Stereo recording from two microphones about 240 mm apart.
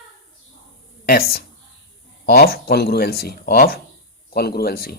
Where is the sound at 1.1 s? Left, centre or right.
Left.